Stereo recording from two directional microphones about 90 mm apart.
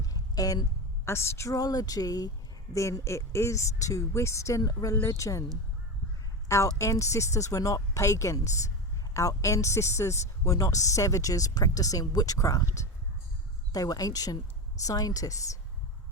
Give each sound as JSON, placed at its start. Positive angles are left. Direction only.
{"t": 0.0, "sound": "a sound", "side_deg": 40}
{"t": 1.0, "sound": "a woman's voice", "side_deg": 30}
{"t": 6.5, "sound": "speech", "side_deg": 35}
{"t": 13.7, "sound": "a woman's voice", "side_deg": 45}